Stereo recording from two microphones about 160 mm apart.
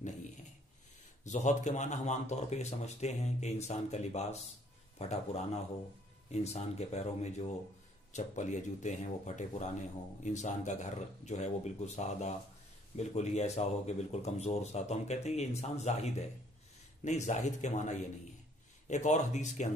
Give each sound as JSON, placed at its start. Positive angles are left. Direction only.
{"t": 1.2, "sound": "speech", "side_deg": 50}